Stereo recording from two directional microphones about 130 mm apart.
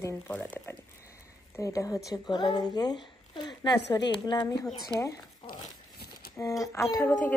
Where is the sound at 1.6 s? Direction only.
25° left (ahead or behind).